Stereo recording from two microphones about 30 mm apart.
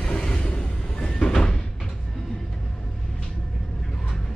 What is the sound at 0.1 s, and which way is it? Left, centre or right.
Train, left.